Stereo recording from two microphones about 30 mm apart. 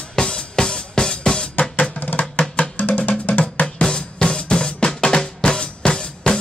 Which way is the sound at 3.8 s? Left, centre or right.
Left.